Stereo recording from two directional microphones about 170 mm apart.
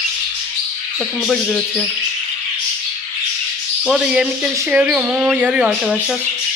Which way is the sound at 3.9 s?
5° right (ahead or behind).